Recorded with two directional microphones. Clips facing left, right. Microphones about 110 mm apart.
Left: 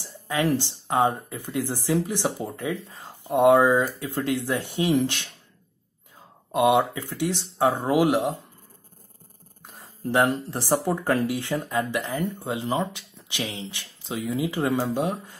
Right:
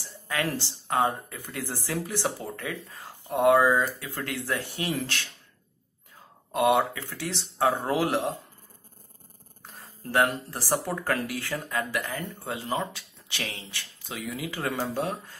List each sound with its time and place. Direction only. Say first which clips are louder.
0.0 s speech: left 5 dB; 20° left (ahead or behind)
6.5 s speech: left 3 dB; 15° left (ahead or behind)
9.6 s speech: left 6 dB; 15° left (ahead or behind)